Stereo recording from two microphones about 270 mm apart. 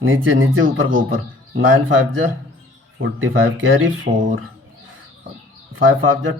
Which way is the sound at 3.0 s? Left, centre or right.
Right.